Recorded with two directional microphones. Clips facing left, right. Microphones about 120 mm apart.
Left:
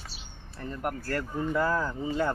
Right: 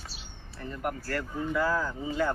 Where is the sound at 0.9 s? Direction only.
45° left (ahead or behind).